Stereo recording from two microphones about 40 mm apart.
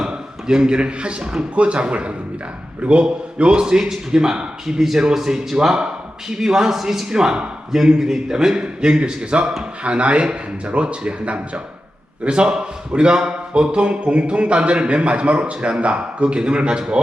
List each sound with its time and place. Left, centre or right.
0.0 s a man's voice: centre
8.5 s a man's voice: right